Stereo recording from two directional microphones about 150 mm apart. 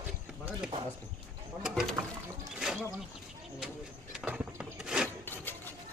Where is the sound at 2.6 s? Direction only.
5° right (ahead or behind).